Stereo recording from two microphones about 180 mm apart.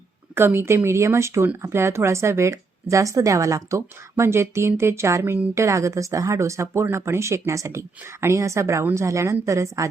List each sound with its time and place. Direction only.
0.3 s speech: 15° right (ahead or behind)